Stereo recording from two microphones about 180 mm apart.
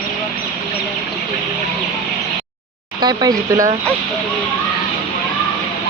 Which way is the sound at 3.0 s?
20° right (ahead or behind).